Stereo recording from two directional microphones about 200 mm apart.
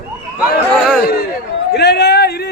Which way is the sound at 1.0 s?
50° left (ahead or behind).